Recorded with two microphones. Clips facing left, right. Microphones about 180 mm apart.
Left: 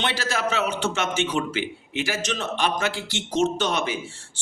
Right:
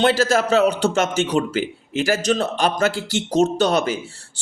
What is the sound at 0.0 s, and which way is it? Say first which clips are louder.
Speech: right 9 dB; 40° right (ahead or behind).